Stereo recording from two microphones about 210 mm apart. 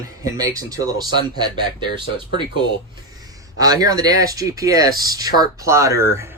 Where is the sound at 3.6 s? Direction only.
15° right (ahead or behind).